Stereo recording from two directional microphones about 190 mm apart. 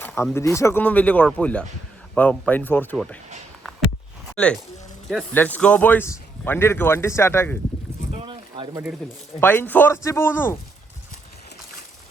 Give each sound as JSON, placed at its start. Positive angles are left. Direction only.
{"t": 0.0, "sound": "speech", "side_deg": 10}
{"t": 3.6, "sound": "a sound", "side_deg": 0}
{"t": 4.4, "sound": "speech", "side_deg": 5}
{"t": 8.1, "sound": "boat", "side_deg": -25}
{"t": 9.4, "sound": "speech", "side_deg": 10}